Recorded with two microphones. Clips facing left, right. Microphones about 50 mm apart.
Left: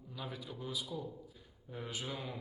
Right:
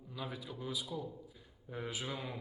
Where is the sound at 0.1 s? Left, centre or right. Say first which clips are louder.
Right 1 dB; centre.